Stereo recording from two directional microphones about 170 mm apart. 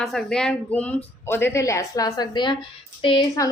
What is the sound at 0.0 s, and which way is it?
A woman's voice, centre (ahead or behind).